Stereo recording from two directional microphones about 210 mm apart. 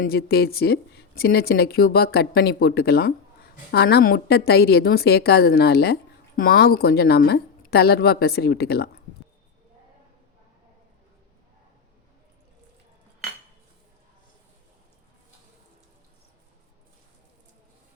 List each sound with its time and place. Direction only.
0.0 s a woman's voice: 45° left (ahead or behind)